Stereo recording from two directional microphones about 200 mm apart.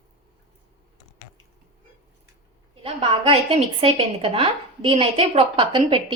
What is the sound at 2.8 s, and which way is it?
A woman's voice, 25° right (ahead or behind).